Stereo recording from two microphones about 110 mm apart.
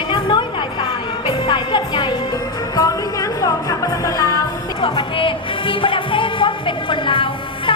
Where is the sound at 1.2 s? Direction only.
45° left (ahead or behind).